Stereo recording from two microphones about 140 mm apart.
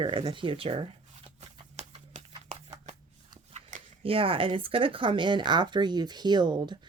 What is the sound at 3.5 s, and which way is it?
Biting, 60° right (ahead or behind).